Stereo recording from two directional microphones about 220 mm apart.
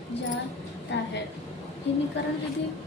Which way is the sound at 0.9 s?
55° left (ahead or behind).